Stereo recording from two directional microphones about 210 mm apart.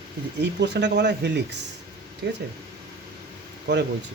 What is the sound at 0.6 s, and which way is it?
Speech, 55° right (ahead or behind).